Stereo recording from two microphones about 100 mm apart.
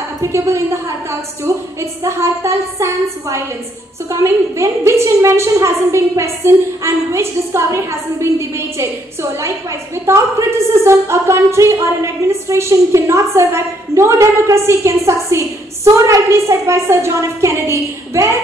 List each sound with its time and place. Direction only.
0.2 s a woman's voice: 25° right (ahead or behind)
10.7 s a woman's voice: 25° right (ahead or behind)